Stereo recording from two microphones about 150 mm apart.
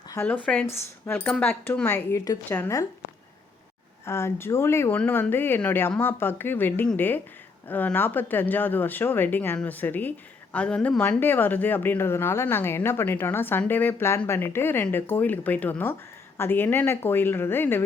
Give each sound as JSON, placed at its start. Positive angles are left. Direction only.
{"t": 0.4, "sound": "a woman's voice", "side_deg": 10}
{"t": 4.0, "sound": "a woman's voice", "side_deg": 15}